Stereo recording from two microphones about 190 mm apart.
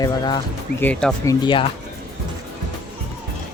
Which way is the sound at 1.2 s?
25° left (ahead or behind).